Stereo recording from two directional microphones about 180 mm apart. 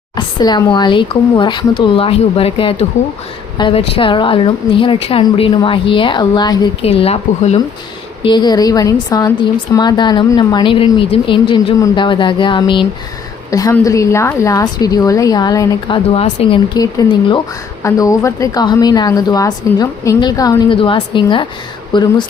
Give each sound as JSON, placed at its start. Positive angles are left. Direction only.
{"t": 0.2, "sound": "a woman's voice", "side_deg": 25}
{"t": 6.8, "sound": "speech", "side_deg": 35}
{"t": 8.2, "sound": "a woman's voice", "side_deg": 25}
{"t": 16.1, "sound": "speech", "side_deg": 30}
{"t": 16.7, "sound": "a woman's voice", "side_deg": 20}